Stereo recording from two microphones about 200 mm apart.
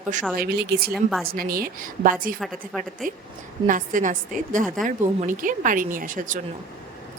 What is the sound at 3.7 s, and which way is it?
A woman's voice, 40° right (ahead or behind).